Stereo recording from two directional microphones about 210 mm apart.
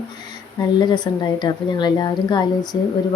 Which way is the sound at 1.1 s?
20° left (ahead or behind).